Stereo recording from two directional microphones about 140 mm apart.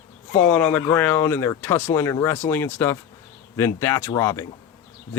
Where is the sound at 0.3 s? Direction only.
10° left (ahead or behind).